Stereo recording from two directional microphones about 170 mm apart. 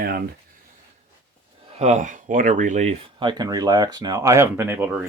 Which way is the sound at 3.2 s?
25° right (ahead or behind).